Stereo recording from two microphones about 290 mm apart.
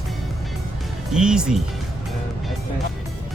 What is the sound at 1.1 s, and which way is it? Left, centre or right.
Speech, centre.